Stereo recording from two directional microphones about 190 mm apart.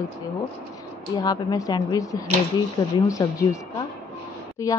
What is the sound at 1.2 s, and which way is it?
A woman's voice, 20° left (ahead or behind).